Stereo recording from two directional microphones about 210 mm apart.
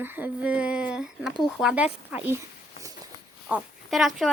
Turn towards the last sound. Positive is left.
turn(degrees=0)  # may be behind; listen again after turning